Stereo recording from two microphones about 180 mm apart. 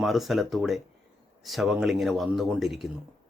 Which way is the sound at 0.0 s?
Centre (ahead or behind).